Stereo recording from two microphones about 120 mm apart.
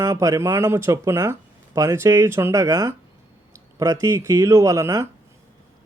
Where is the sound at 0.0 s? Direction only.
25° right (ahead or behind).